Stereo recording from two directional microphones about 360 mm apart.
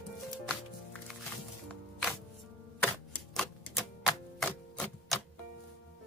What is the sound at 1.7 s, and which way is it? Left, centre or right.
Music, centre.